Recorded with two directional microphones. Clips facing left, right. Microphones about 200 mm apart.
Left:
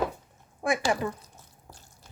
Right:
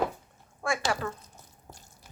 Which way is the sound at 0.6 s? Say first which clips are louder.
Left 3 dB; 20° left (ahead or behind).